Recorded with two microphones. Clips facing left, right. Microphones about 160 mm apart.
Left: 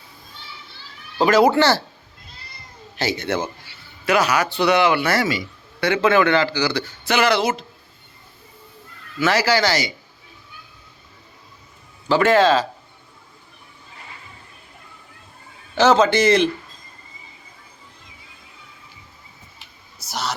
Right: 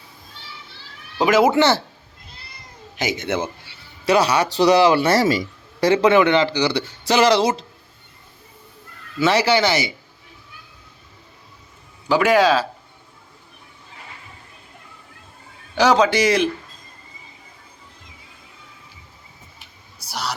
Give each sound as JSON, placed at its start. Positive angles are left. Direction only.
{"t": 1.2, "sound": "a man's voice", "side_deg": -15}
{"t": 3.0, "sound": "speech", "side_deg": -20}
{"t": 6.1, "sound": "speech", "side_deg": -20}
{"t": 9.1, "sound": "speech", "side_deg": -25}
{"t": 12.0, "sound": "a man's voice", "side_deg": -10}
{"t": 15.8, "sound": "a man's voice", "side_deg": -10}